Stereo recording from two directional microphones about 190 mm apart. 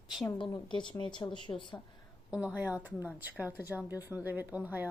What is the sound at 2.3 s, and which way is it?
Speech, 5° right (ahead or behind).